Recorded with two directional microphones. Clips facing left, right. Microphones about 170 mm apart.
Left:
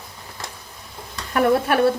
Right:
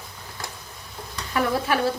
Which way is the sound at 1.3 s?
55° left (ahead or behind).